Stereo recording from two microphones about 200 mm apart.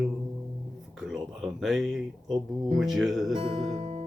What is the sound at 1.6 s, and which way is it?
Speech, centre (ahead or behind).